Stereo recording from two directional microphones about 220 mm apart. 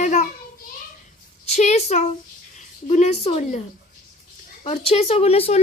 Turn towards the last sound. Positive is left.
turn(degrees=25)  # may be behind; listen again after turning